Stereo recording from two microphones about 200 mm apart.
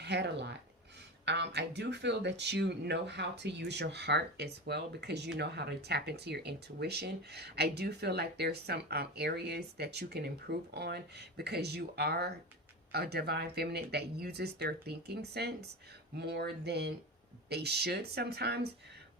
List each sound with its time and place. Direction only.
0.0 s speech: 60° right (ahead or behind)